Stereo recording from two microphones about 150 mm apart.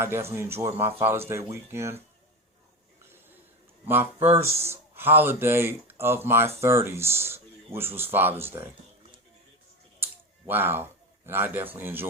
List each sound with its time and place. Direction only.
0.0 s speech: 15° right (ahead or behind)
3.0 s a sound: 15° right (ahead or behind)
3.8 s speech: 15° right (ahead or behind)
10.0 s speech: 15° right (ahead or behind)